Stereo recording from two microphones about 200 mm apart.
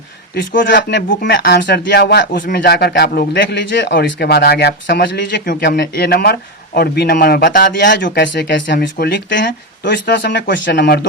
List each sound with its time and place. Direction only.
0.3 s speech: 65° left (ahead or behind)